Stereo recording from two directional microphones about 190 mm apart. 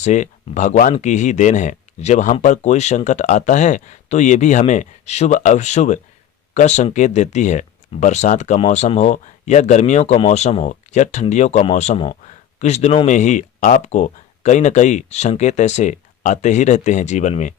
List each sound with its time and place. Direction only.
0.0 s speech: 40° left (ahead or behind)